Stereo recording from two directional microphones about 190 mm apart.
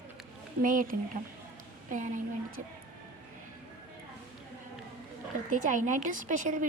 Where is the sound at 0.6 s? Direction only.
45° right (ahead or behind).